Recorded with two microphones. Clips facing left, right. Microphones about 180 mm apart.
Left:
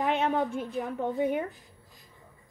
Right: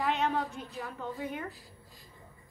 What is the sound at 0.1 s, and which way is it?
A woman's voice, 55° left (ahead or behind).